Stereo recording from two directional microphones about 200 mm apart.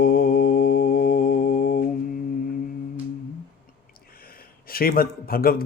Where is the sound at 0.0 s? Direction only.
50° left (ahead or behind).